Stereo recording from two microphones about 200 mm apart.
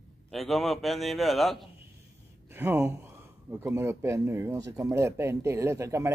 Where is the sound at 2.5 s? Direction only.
10° right (ahead or behind).